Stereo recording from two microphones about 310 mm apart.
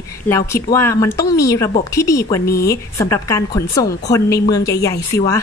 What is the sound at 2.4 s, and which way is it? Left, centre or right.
Speech, left.